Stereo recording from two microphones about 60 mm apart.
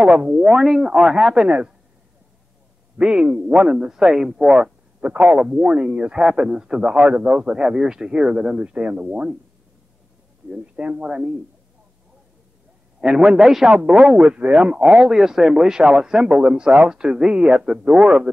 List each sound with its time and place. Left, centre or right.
0.0 s speech: centre
3.0 s speech: centre
10.5 s speech: centre
13.0 s speech: centre